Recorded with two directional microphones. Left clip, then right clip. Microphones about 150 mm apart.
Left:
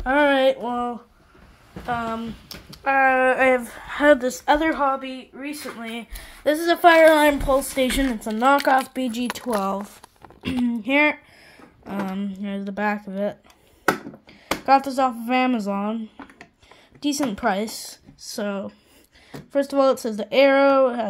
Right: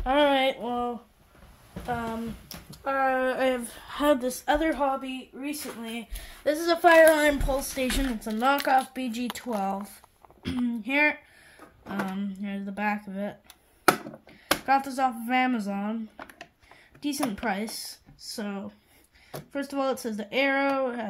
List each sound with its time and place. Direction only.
0.0 s a sound: centre (ahead or behind)
1.9 s a woman's voice: 5° left (ahead or behind)
8.1 s speech: 15° left (ahead or behind)
14.7 s speech: 25° left (ahead or behind)
17.0 s speech: 25° left (ahead or behind)